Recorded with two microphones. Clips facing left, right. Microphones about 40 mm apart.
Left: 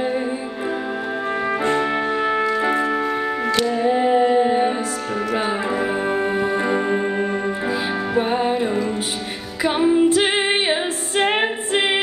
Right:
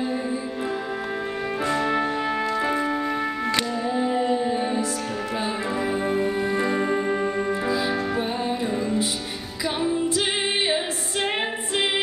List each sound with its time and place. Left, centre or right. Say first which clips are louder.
1.7 s music: even; left
5.8 s music: left 3 dB; left
7.6 s music: left 1 dB; left
9.6 s female singing: left 8 dB; left